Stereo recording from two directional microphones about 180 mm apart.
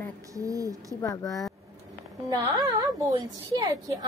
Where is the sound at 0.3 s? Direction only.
20° right (ahead or behind).